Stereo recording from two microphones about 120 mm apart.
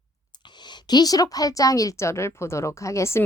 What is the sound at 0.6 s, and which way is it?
Speech, 35° left (ahead or behind).